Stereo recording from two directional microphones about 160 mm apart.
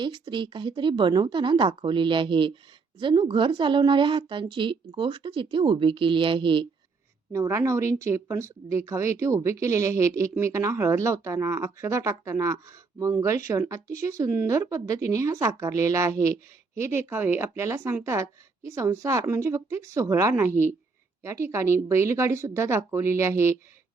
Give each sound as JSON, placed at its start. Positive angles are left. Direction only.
{"t": 0.0, "sound": "speech", "side_deg": -30}
{"t": 7.3, "sound": "a woman's voice", "side_deg": -20}